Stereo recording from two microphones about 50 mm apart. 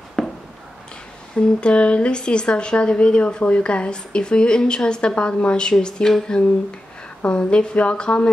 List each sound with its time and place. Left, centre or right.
0.2 s a sound: centre
1.3 s speech: left
7.2 s speech: centre